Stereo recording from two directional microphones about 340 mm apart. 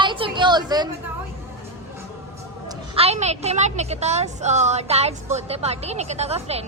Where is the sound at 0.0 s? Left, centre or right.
Centre.